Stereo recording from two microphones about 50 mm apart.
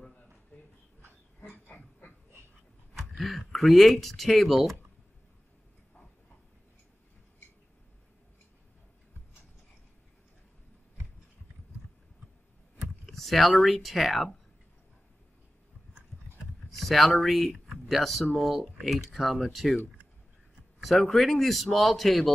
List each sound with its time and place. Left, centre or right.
1.5 s a sound: left
3.2 s speech: centre
13.0 s speech: centre
16.7 s speech: centre
20.8 s speech: centre